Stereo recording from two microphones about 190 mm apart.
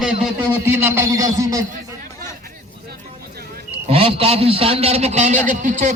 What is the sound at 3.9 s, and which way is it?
A man's voice, 30° right (ahead or behind).